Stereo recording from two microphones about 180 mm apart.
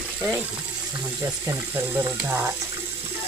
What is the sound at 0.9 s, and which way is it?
Speech, 15° right (ahead or behind).